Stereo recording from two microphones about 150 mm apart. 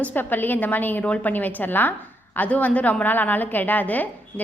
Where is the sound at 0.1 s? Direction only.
10° left (ahead or behind).